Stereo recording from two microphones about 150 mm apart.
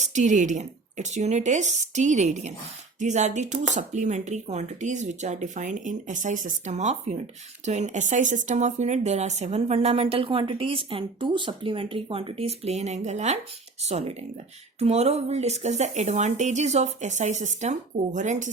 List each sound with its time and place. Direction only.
0.0 s speech: 55° right (ahead or behind)